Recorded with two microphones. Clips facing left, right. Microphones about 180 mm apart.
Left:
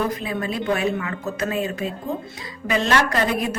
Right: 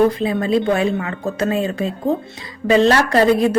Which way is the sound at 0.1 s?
30° right (ahead or behind).